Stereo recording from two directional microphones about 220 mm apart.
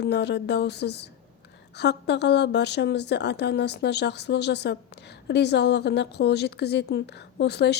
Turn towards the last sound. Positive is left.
turn(degrees=50)  # may be behind; listen again after turning